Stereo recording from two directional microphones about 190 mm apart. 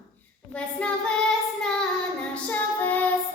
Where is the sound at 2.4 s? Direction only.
10° left (ahead or behind).